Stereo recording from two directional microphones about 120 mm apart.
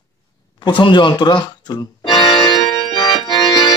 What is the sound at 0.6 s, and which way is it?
Music, 40° left (ahead or behind).